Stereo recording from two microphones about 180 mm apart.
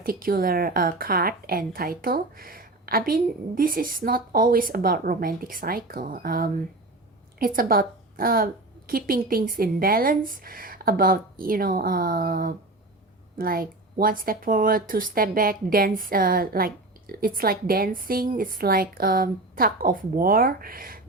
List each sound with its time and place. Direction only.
0.0 s a woman's voice: 55° right (ahead or behind)